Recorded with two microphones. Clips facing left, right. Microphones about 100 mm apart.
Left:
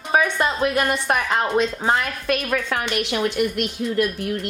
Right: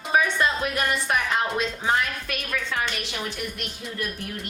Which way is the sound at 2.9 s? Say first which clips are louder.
Left 10 dB; 75° left (ahead or behind).